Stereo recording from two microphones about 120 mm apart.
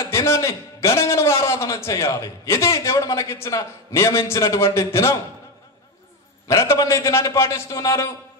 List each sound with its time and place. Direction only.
0.0 s a man's voice: 25° left (ahead or behind)
6.4 s a man's voice: 25° left (ahead or behind)